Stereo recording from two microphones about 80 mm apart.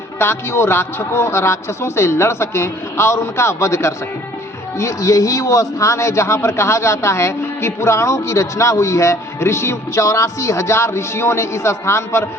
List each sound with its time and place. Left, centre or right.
0.2 s a man's voice: left